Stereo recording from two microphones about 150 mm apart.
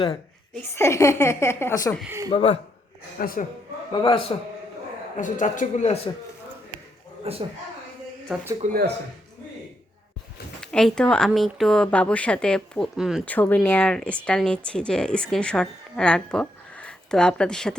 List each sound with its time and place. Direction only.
0.5 s a woman's voice: 15° left (ahead or behind)
2.0 s speech: 20° right (ahead or behind)
2.3 s speech: 45° left (ahead or behind)
3.2 s a woman's voice: 70° left (ahead or behind)
4.0 s a man's voice: 35° left (ahead or behind)
5.1 s speech: 60° left (ahead or behind)
7.3 s a man's voice: 45° right (ahead or behind)
8.3 s speech: centre (ahead or behind)
10.6 s speech: 5° left (ahead or behind)
13.2 s speech: 10° left (ahead or behind)